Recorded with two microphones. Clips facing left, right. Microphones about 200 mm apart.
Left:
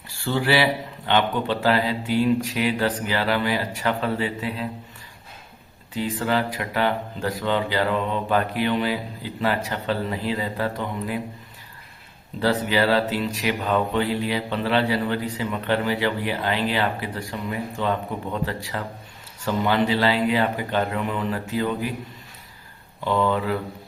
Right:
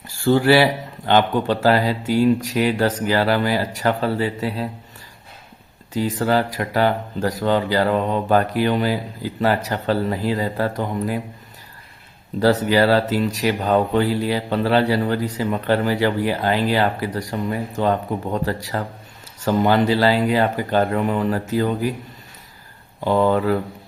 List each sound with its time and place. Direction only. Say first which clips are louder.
0.1 s speech: right 7 dB; 45° right (ahead or behind)
5.9 s speech: right 5 dB; 40° right (ahead or behind)
12.4 s speech: right 5 dB; 40° right (ahead or behind)
23.0 s speech: right 5 dB; 40° right (ahead or behind)